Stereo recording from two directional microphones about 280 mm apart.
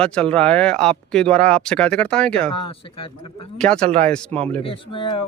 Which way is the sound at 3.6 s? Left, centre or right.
Centre.